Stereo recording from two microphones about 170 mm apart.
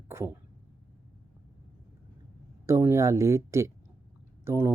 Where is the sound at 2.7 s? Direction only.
15° right (ahead or behind).